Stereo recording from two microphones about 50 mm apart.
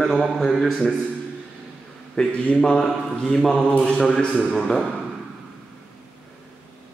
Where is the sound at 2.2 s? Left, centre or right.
Centre.